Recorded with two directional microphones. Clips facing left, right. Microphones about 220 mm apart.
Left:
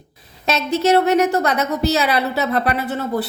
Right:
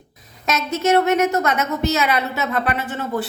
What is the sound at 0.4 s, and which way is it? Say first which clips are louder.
A woman's voice: left 3 dB; 30° left (ahead or behind).